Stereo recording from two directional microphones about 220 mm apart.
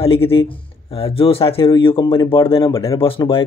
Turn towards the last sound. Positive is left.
turn(degrees=25)  # may be behind; listen again after turning